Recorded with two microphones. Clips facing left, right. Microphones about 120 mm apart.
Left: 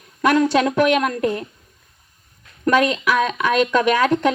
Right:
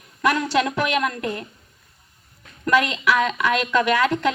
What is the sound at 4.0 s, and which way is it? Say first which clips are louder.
Speech: left 3 dB; 40° left (ahead or behind).